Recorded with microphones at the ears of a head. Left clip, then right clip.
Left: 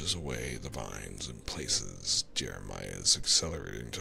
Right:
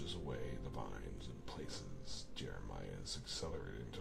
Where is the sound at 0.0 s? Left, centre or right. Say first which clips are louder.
Left 11 dB; left.